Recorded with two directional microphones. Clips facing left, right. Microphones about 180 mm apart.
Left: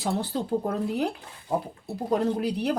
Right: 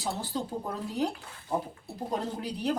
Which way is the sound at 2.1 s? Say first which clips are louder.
Left 9 dB; 70° left (ahead or behind).